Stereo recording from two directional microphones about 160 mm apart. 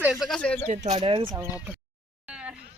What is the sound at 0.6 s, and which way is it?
Speech, 45° right (ahead or behind).